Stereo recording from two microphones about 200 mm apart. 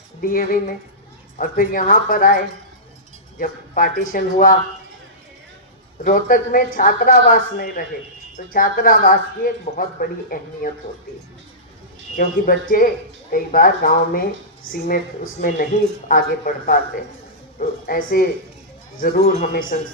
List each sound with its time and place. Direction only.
0.2 s speech: 45° left (ahead or behind)
6.1 s speech: 45° left (ahead or behind)
12.1 s speech: 45° left (ahead or behind)